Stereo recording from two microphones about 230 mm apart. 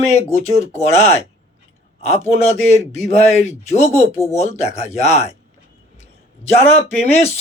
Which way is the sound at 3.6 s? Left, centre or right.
Left.